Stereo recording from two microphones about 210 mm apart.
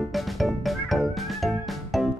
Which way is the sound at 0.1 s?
Centre (ahead or behind).